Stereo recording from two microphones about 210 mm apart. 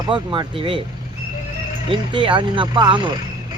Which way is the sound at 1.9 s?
25° right (ahead or behind).